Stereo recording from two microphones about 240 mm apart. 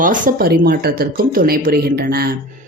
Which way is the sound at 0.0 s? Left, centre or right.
Right.